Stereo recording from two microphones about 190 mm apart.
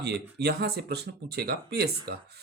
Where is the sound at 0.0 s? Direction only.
60° right (ahead or behind).